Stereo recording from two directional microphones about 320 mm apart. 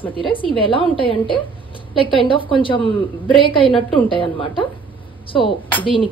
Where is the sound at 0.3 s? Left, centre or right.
Centre.